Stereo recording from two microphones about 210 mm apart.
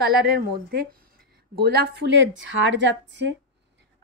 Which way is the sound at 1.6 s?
50° right (ahead or behind).